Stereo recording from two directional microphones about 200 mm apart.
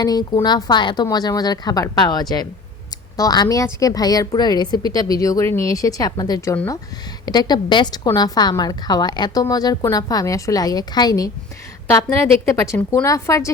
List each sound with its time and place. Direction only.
0.0 s a woman's voice: 20° left (ahead or behind)